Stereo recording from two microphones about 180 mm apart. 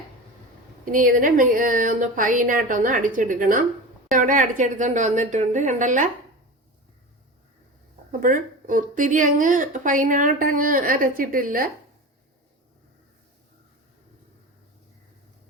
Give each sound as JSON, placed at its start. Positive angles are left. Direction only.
{"t": 0.9, "sound": "a woman's voice", "side_deg": -50}
{"t": 8.2, "sound": "a woman's voice", "side_deg": -45}